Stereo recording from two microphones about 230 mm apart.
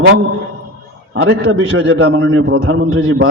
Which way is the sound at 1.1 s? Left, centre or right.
Right.